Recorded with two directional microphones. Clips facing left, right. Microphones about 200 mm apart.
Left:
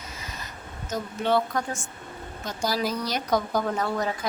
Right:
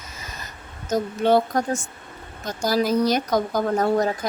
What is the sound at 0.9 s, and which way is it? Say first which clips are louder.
Speech: right 6 dB; 40° right (ahead or behind).